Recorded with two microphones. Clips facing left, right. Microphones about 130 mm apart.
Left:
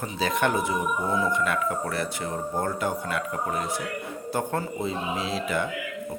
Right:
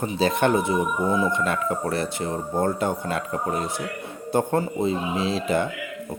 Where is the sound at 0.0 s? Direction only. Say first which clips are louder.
Right 4 dB; 25° right (ahead or behind).